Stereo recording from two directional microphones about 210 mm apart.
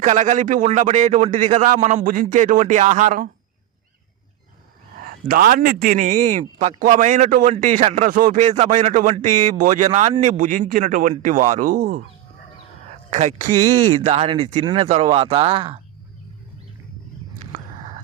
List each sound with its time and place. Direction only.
0.0 s a man's voice: 35° right (ahead or behind)
4.9 s a man's voice: 45° right (ahead or behind)
13.1 s speech: 35° right (ahead or behind)